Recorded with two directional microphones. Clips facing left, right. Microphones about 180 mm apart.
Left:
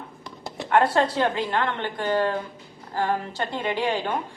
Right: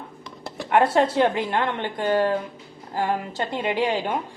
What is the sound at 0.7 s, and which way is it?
A woman's voice, 15° right (ahead or behind).